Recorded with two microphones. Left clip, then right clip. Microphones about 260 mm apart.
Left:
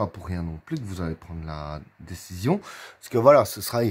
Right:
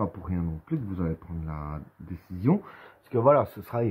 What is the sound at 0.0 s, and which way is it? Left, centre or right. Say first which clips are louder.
Speech: left 2 dB; left.